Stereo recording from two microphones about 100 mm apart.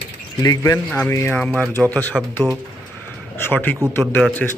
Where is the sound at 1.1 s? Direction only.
25° left (ahead or behind).